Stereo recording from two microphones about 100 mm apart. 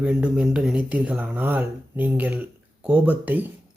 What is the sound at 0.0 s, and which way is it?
Speech, 10° right (ahead or behind).